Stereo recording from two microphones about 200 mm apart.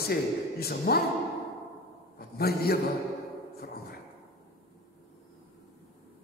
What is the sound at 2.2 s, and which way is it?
Speech, 50° left (ahead or behind).